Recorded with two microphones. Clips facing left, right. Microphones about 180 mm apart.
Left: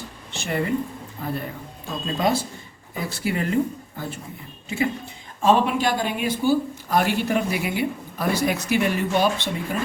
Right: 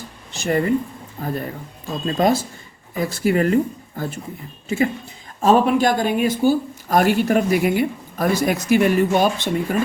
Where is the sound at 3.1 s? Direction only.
45° right (ahead or behind).